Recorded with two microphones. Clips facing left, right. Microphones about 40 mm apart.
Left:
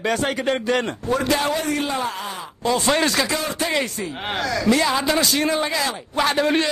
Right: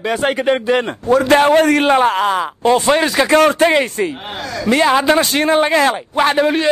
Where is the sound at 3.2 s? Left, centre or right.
Right.